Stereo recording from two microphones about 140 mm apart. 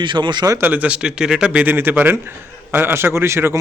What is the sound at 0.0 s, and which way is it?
Speech, 35° right (ahead or behind).